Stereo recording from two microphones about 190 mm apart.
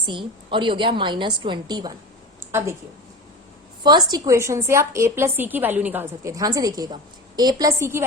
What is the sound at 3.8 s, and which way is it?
A woman's voice, 20° right (ahead or behind).